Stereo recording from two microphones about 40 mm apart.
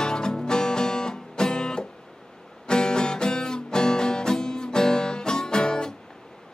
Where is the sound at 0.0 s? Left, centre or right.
Centre.